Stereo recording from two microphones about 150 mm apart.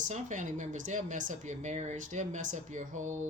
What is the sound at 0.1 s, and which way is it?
Speech, 55° right (ahead or behind).